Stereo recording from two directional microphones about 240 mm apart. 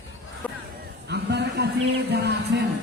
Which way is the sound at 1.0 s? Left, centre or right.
Right.